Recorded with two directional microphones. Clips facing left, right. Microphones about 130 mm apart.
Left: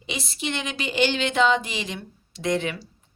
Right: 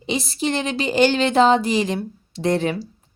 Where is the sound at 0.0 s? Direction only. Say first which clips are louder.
Right 8 dB; 35° right (ahead or behind).